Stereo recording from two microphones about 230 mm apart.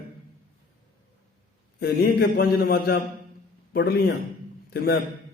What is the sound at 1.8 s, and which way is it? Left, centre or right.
A man's voice, left.